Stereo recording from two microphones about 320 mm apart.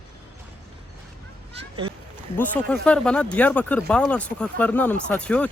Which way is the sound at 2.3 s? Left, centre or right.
Centre.